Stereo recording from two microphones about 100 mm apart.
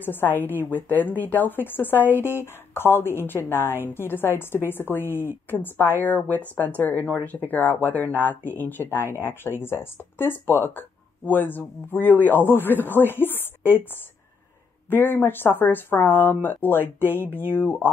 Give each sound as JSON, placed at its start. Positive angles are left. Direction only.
{"t": 0.0, "sound": "speech", "side_deg": 20}
{"t": 14.9, "sound": "speech", "side_deg": 20}